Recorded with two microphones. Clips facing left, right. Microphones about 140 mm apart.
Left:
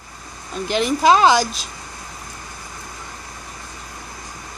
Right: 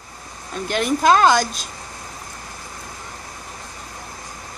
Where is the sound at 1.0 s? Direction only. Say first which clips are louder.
Left 1 dB; 5° left (ahead or behind).